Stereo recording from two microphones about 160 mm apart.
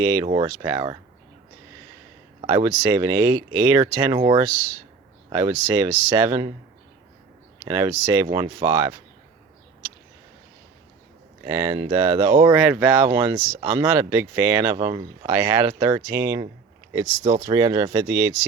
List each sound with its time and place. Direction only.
0.0 s speech: 15° right (ahead or behind)
2.5 s speech: 25° right (ahead or behind)
7.6 s speech: 15° right (ahead or behind)
11.4 s speech: 15° right (ahead or behind)
12.5 s speech: 10° right (ahead or behind)